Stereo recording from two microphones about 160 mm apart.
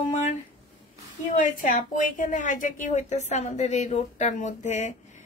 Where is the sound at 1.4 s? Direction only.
50° left (ahead or behind).